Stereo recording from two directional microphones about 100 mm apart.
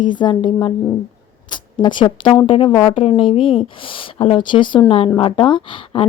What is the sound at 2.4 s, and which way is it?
Speech, 65° left (ahead or behind).